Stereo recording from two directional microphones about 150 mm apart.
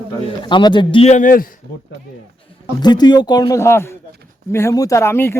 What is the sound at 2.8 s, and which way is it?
Speech, 30° left (ahead or behind).